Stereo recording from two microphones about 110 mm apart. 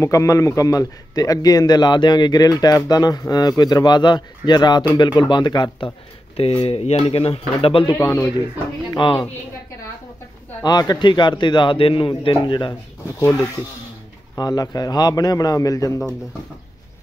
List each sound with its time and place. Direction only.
0.0 s speech: 30° left (ahead or behind)
6.3 s a man's voice: 60° left (ahead or behind)
8.0 s speech: 25° left (ahead or behind)
8.9 s a man's voice: 45° left (ahead or behind)
10.6 s a man's voice: 35° left (ahead or behind)
14.3 s speech: 35° left (ahead or behind)